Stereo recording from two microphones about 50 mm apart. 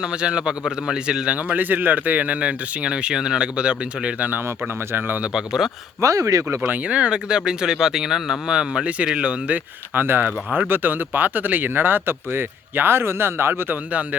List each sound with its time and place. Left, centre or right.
0.0 s speech: centre
1.4 s speech: right
4.9 s speech: right
5.3 s speech: centre
6.0 s speech: right
6.8 s speech: right
9.9 s speech: right